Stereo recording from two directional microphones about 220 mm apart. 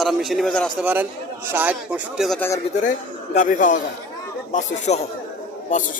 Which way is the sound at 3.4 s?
35° left (ahead or behind).